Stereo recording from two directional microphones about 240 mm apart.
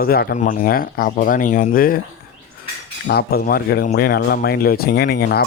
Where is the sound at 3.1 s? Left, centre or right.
Left.